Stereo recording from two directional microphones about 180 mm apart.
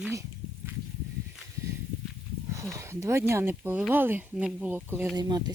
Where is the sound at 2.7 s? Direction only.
15° right (ahead or behind).